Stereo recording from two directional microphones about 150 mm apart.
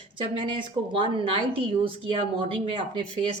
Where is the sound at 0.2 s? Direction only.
35° right (ahead or behind).